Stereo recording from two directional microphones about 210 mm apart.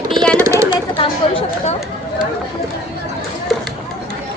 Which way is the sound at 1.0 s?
25° left (ahead or behind).